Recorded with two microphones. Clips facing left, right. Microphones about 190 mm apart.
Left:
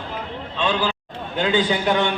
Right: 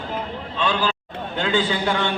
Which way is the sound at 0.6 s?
20° left (ahead or behind).